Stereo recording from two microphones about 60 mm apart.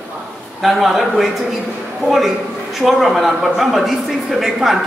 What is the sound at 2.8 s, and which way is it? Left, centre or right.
Speech, centre.